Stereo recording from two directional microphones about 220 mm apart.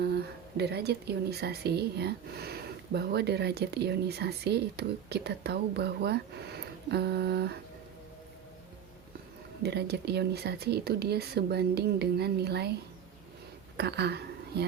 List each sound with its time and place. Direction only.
0.0 s a woman's voice: 45° right (ahead or behind)
9.6 s a woman's voice: 50° right (ahead or behind)
13.7 s a woman's voice: 50° right (ahead or behind)